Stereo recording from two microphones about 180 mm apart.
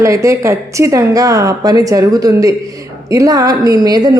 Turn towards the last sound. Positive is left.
turn(degrees=-20)  # may be behind; listen again after turning